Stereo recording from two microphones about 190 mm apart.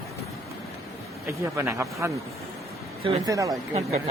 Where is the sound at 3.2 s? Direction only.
20° right (ahead or behind).